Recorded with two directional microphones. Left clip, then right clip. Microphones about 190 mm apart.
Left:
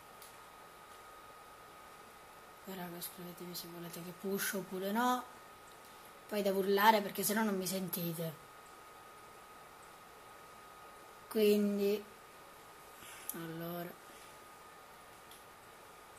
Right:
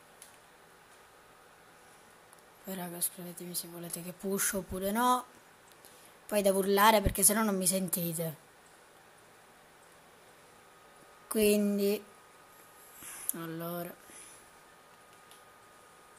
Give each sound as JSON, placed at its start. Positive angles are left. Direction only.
{"t": 2.7, "sound": "a woman's voice", "side_deg": -40}
{"t": 6.3, "sound": "a woman's voice", "side_deg": -40}
{"t": 11.2, "sound": "a woman's voice", "side_deg": -35}
{"t": 13.0, "sound": "a sound", "side_deg": -30}